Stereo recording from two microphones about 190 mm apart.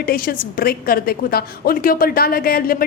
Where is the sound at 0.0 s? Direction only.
50° left (ahead or behind).